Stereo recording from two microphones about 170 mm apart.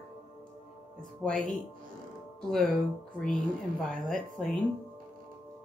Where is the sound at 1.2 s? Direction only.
5° left (ahead or behind).